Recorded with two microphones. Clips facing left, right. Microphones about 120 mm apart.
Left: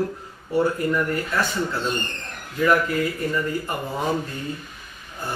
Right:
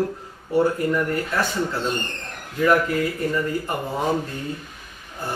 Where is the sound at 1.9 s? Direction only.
40° right (ahead or behind).